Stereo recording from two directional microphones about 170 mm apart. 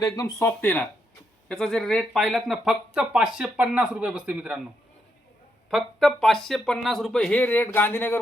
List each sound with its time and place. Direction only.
0.0 s speech: 20° left (ahead or behind); by 4.6 s 5° right (ahead or behind)
5.7 s speech: 5° left (ahead or behind)